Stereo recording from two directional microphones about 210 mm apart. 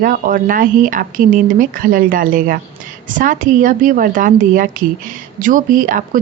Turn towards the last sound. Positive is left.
turn(degrees=-40)  # may be behind; listen again after turning